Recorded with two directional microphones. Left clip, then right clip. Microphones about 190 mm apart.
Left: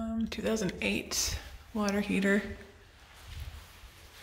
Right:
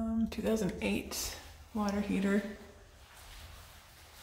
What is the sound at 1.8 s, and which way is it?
Speech, 15° left (ahead or behind).